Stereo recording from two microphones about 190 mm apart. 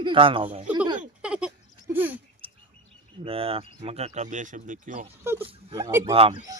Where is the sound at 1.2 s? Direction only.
5° right (ahead or behind).